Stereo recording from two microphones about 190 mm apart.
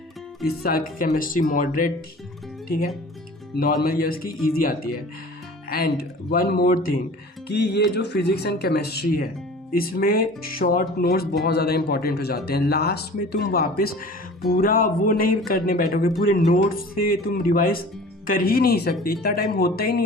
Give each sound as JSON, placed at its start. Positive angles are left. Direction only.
{"t": 0.6, "sound": "speech", "side_deg": 50}
{"t": 3.6, "sound": "speech", "side_deg": 50}
{"t": 5.6, "sound": "speech", "side_deg": 55}